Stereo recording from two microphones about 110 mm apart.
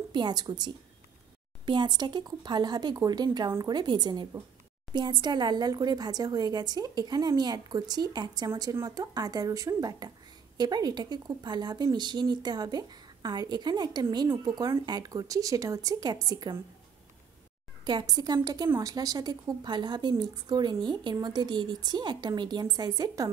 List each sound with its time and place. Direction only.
0.1 s speech: 40° right (ahead or behind)
17.8 s speech: 40° right (ahead or behind)